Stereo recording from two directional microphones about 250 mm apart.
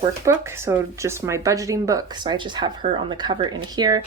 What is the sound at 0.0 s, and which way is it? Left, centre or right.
Speech, centre.